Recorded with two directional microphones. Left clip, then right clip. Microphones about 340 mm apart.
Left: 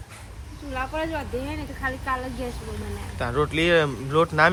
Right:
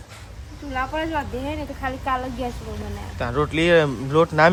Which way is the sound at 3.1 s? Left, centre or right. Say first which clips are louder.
Right 1 dB; centre.